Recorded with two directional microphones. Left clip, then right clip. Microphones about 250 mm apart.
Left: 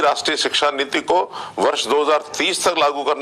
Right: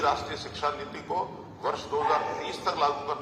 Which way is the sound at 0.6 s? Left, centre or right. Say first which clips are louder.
Left 12 dB; left.